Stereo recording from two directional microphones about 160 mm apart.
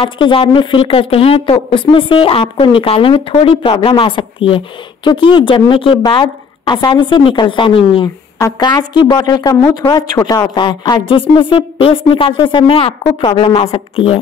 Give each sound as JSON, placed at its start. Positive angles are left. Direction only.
{"t": 0.0, "sound": "a woman's voice", "side_deg": 35}